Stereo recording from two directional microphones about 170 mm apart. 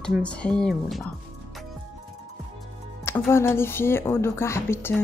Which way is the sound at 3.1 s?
15° left (ahead or behind).